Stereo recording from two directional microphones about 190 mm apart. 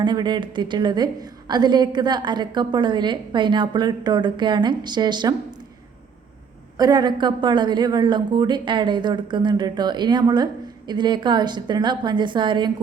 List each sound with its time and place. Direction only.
0.0 s a woman's voice: 25° right (ahead or behind)
6.7 s a woman's voice: 20° right (ahead or behind)